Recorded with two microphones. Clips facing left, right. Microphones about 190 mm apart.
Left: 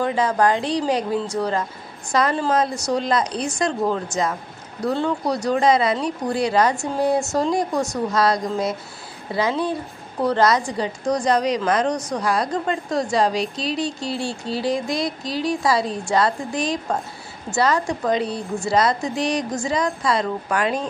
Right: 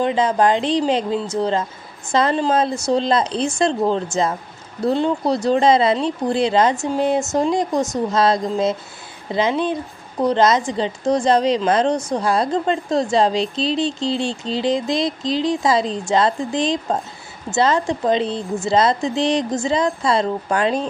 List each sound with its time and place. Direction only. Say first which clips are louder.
0.0 s a woman's voice: right 2 dB; 20° right (ahead or behind)